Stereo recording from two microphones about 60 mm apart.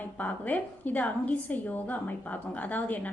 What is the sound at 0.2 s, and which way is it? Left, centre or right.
A woman's voice, left.